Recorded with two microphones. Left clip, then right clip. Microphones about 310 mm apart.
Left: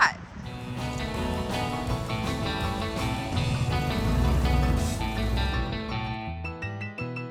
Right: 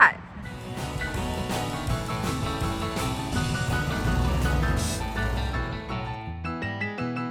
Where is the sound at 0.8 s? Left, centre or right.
Centre.